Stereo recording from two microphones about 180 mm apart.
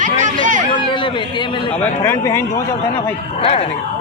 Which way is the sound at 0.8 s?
25° left (ahead or behind).